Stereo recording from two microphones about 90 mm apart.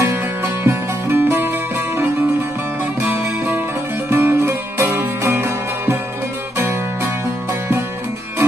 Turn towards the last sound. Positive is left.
turn(degrees=-25)  # may be behind; listen again after turning